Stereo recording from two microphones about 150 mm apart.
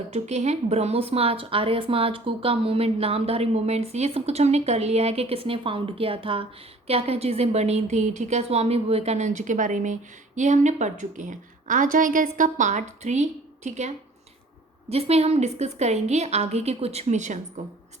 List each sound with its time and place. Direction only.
0.1 s speech: 50° right (ahead or behind)